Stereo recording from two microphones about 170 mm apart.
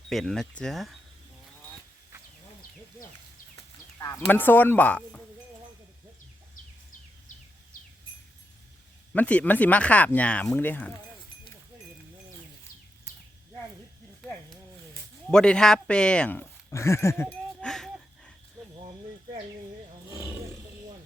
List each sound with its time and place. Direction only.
0.1 s speech: centre (ahead or behind)
3.5 s speech: 15° left (ahead or behind)
9.1 s speech: 10° left (ahead or behind)
15.3 s speech: 5° left (ahead or behind)
17.6 s wheeze: 5° left (ahead or behind)